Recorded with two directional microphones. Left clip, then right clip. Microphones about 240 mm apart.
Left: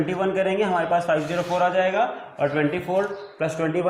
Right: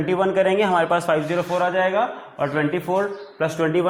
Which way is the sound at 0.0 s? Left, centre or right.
Right.